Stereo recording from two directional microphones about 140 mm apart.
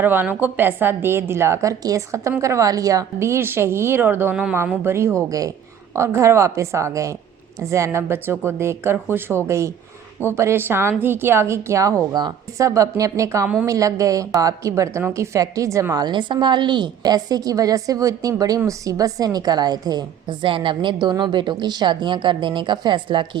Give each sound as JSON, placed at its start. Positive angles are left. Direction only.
{"t": 0.0, "sound": "a woman's voice", "side_deg": -15}